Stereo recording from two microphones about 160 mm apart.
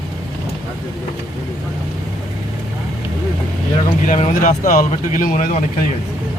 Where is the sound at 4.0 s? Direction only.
50° left (ahead or behind).